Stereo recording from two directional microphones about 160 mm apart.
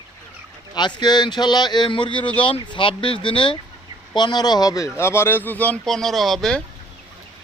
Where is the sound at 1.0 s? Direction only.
25° left (ahead or behind); by 6.6 s centre (ahead or behind).